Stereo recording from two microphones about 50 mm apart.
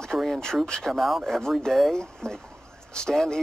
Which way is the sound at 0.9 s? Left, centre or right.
Centre.